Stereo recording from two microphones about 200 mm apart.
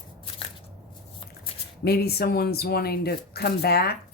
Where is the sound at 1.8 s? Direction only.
50° left (ahead or behind).